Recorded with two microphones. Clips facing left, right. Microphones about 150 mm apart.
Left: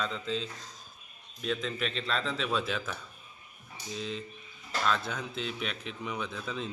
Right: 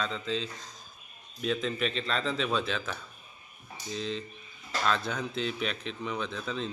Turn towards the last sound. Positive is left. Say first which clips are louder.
# right 2 dB
turn(degrees=5)  # may be behind; listen again after turning